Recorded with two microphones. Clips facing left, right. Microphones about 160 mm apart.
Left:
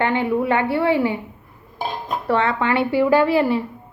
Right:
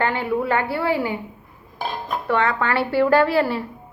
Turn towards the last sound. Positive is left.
turn(degrees=15)  # may be behind; listen again after turning